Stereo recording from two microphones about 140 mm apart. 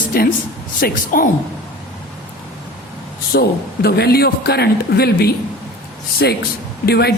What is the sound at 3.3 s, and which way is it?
A woman's voice, 90° left.